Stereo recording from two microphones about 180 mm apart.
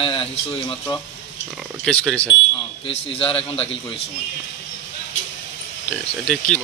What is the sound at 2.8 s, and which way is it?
Speech, 30° left (ahead or behind).